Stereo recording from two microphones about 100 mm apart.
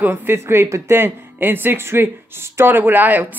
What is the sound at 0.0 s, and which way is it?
Speech, 20° right (ahead or behind).